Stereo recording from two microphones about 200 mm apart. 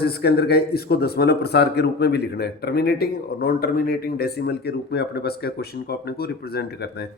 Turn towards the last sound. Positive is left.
turn(degrees=55)  # may be behind; listen again after turning